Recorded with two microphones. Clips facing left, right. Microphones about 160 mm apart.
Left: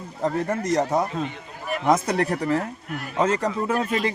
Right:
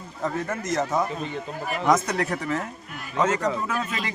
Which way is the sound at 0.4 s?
35° left (ahead or behind).